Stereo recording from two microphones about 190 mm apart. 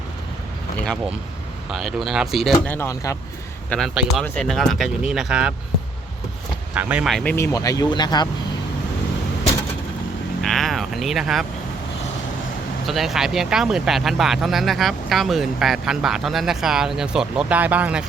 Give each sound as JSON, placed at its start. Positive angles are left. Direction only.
{"t": 1.7, "sound": "speech", "side_deg": 0}
{"t": 2.7, "sound": "speech", "side_deg": 15}
{"t": 3.7, "sound": "speech", "side_deg": 0}
{"t": 6.7, "sound": "speech", "side_deg": -5}
{"t": 7.3, "sound": "speech", "side_deg": 15}
{"t": 10.4, "sound": "a sound", "side_deg": 0}
{"t": 12.9, "sound": "speech", "side_deg": 0}